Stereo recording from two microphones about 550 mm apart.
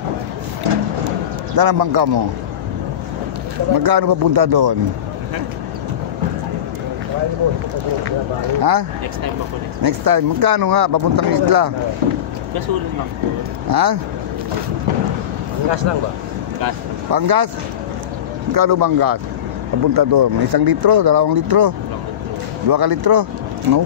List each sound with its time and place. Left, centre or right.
0.7 s music: right
1.6 s speech: right
3.7 s speech: right
8.5 s speech: right
13.7 s speech: right
16.6 s a sound: right
18.5 s speech: right